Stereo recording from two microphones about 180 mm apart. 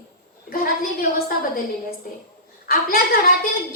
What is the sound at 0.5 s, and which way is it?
A woman's voice, 55° left (ahead or behind).